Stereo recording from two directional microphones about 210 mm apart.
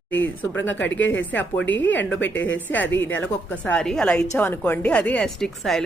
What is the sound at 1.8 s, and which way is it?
Speech, 60° left (ahead or behind).